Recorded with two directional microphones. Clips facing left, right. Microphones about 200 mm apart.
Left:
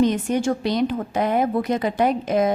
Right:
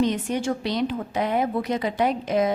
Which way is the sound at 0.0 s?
45° left (ahead or behind).